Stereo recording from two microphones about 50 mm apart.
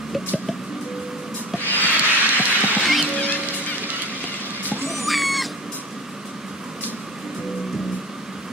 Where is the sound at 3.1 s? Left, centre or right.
Left.